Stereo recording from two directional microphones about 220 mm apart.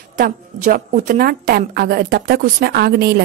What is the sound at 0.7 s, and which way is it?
A woman's voice, 40° right (ahead or behind).